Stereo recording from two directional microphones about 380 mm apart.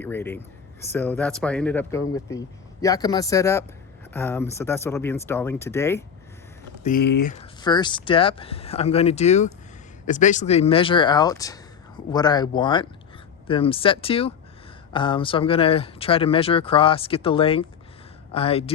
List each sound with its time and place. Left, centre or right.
0.0 s speech: centre
6.8 s speech: left
7.6 s speech: centre